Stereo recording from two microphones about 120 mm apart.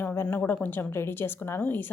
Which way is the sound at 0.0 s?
20° left (ahead or behind).